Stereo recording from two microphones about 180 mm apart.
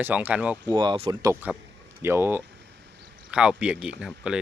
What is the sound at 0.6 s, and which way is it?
Speech, 25° right (ahead or behind).